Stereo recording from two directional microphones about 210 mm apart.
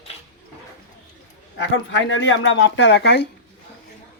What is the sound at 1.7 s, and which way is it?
Speech, 65° left (ahead or behind).